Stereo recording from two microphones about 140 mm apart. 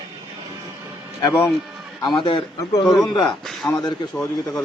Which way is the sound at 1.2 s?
20° left (ahead or behind).